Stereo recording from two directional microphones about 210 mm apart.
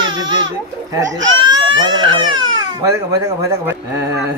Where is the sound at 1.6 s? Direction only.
20° right (ahead or behind).